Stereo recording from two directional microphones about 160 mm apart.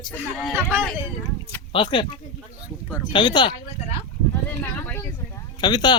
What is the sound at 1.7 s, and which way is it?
Speech, 30° left (ahead or behind).